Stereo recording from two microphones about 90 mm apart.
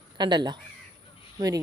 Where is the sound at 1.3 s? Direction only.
45° right (ahead or behind).